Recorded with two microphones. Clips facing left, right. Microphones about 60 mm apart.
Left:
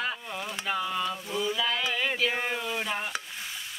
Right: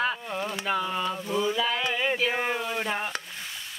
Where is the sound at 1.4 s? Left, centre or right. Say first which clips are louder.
Right 1 dB; centre.